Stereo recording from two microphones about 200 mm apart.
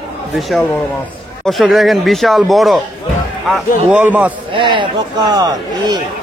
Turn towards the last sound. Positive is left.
turn(degrees=-20)  # may be behind; listen again after turning